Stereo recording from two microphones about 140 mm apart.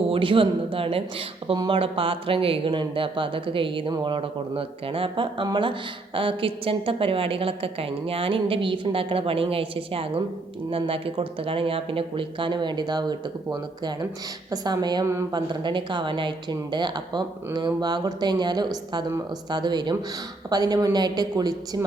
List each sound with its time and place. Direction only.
0.1 s a woman's voice: 40° right (ahead or behind)